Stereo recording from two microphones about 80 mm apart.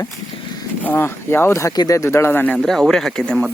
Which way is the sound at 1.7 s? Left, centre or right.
Left.